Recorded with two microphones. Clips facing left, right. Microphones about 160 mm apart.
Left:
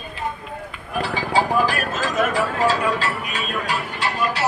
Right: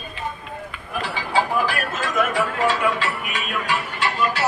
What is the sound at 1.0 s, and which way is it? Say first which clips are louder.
Speech: left 2 dB; 40° left (ahead or behind).